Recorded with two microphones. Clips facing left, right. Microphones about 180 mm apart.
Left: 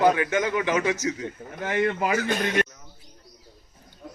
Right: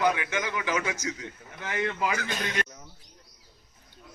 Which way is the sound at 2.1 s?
45° left (ahead or behind).